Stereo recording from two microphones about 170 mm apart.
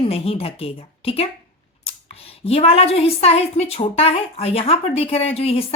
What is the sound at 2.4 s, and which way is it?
A woman's voice, 35° left (ahead or behind).